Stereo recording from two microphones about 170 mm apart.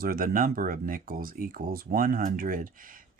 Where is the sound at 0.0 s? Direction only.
60° right (ahead or behind).